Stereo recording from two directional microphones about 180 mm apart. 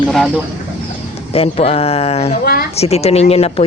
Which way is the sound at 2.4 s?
55° left (ahead or behind).